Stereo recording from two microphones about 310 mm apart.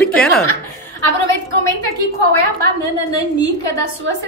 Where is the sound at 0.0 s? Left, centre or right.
Centre.